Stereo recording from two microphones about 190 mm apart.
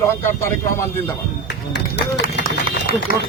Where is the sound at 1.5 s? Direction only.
65° left (ahead or behind).